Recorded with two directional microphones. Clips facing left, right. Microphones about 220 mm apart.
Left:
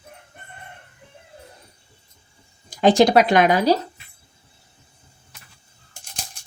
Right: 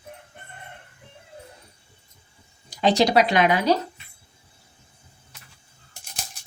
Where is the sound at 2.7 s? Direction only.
50° left (ahead or behind).